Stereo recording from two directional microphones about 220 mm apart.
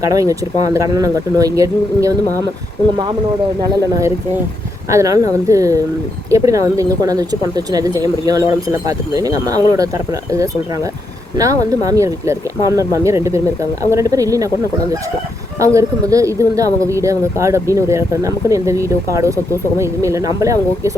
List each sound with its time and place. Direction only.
0.2 s speech: 15° right (ahead or behind)
3.7 s speech: 15° right (ahead or behind)
15.6 s speech: 15° right (ahead or behind)